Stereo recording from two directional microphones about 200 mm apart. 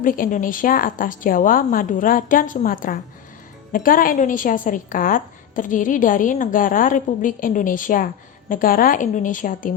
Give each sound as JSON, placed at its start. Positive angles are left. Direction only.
{"t": 0.0, "sound": "a woman's voice", "side_deg": 45}